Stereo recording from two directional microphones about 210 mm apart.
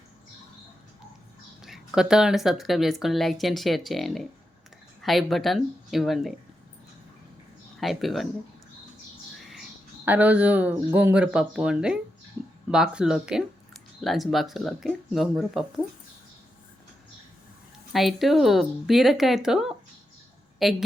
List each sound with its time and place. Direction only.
1.6 s speech: centre (ahead or behind)
7.8 s speech: centre (ahead or behind)
10.1 s speech: 5° right (ahead or behind)
17.9 s a woman's voice: centre (ahead or behind)